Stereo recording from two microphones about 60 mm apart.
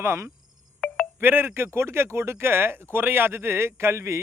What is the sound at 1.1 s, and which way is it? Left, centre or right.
Speech, right.